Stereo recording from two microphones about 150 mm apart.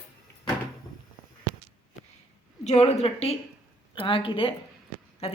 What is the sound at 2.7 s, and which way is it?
A woman's voice, 45° left (ahead or behind).